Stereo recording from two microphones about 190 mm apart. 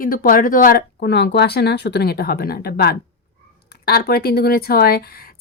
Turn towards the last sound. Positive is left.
turn(degrees=50)  # may be behind; listen again after turning